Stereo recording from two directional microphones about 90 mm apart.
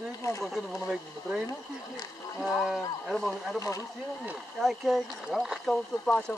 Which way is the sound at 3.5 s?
35° left (ahead or behind).